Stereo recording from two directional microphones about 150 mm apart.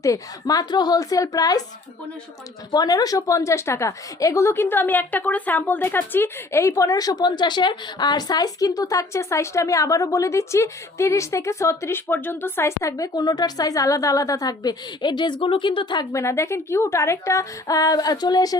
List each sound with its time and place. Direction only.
0.0 s a woman's voice: 25° left (ahead or behind)
2.7 s a woman's voice: 25° left (ahead or behind)